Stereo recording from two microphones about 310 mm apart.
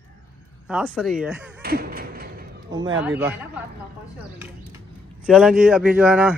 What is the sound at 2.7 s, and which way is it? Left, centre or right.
Speech, centre.